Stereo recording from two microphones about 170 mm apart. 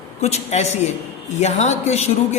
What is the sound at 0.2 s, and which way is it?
A woman's voice, 40° left (ahead or behind).